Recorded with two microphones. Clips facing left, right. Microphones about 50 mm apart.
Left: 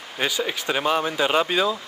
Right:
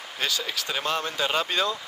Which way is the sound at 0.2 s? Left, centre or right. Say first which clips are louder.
Left 4 dB; left.